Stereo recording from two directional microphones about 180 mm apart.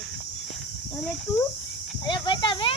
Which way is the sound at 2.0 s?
25° left (ahead or behind).